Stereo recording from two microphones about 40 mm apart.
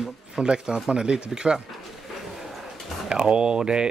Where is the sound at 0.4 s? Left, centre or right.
Right.